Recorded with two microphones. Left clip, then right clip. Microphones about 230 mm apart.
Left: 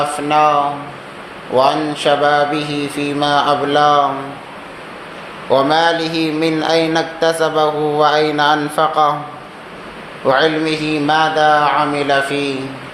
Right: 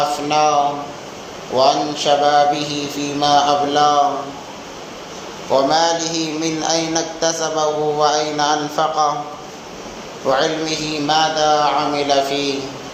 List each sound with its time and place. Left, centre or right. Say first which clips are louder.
0.3 s speech: left 4 dB; left
1.5 s speech: left 1 dB; left
5.5 s speech: left 2 dB; left
10.2 s speech: left 4 dB; left